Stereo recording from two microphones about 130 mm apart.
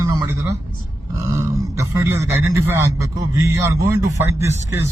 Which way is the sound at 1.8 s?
20° right (ahead or behind).